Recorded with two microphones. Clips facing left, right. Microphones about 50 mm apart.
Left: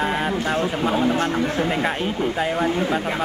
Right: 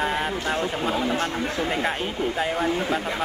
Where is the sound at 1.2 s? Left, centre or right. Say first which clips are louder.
Left 4 dB; left.